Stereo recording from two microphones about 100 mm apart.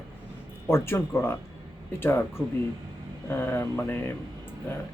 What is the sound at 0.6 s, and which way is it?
Speech, 25° left (ahead or behind).